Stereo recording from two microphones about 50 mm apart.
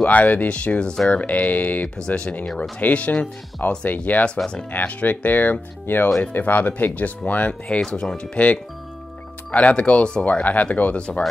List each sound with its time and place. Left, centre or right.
0.0 s speech: left; by 1.2 s centre
1.2 s speech: left
2.0 s speech: centre
2.8 s speech: left
7.6 s speech: centre
9.5 s speech: left
10.4 s speech: left